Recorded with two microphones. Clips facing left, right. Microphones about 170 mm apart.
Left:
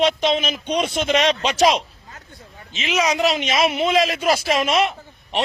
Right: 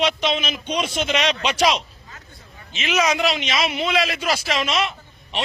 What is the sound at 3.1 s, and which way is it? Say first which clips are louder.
A man's voice: left 3 dB; 40° left (ahead or behind).